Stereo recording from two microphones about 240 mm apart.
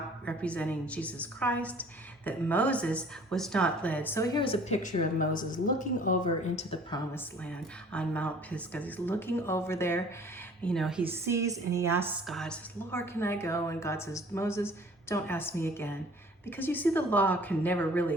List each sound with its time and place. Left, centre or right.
0.3 s a woman's voice: centre; by 7.0 s left
7.9 s a woman's voice: centre
12.3 s a woman's voice: centre